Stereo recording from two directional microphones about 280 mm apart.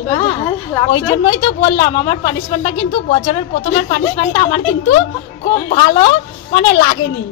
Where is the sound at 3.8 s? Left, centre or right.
Centre.